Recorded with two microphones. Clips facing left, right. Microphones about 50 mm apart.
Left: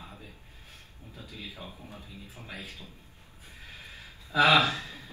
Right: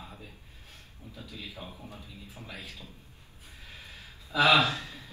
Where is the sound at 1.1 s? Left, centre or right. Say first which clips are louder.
Even; left.